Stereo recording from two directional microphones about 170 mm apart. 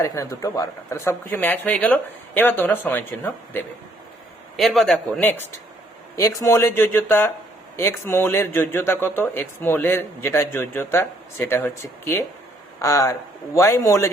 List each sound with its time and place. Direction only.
0.0 s speech: 20° left (ahead or behind)
4.5 s speech: centre (ahead or behind); by 14.1 s 15° left (ahead or behind)